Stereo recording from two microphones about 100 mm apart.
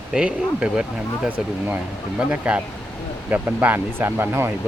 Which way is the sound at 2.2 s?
10° right (ahead or behind).